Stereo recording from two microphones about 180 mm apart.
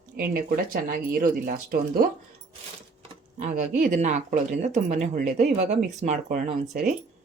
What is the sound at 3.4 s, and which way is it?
Speech, 40° right (ahead or behind).